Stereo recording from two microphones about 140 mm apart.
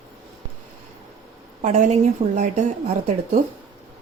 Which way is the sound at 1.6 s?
55° right (ahead or behind).